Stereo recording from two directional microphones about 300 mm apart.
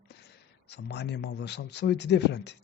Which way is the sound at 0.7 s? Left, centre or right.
Left.